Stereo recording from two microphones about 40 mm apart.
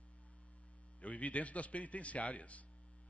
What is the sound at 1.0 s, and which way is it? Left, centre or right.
A man's voice, left.